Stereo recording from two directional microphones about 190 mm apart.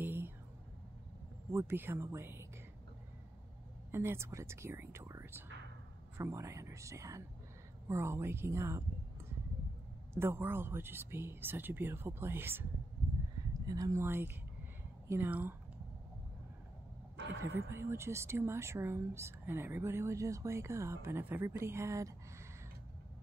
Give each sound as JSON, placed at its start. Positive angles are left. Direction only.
{"t": 0.0, "sound": "a sound", "side_deg": -10}
{"t": 1.5, "sound": "speech", "side_deg": -15}
{"t": 3.9, "sound": "speech", "side_deg": -15}
{"t": 10.1, "sound": "speech", "side_deg": -10}
{"t": 17.4, "sound": "speech", "side_deg": -15}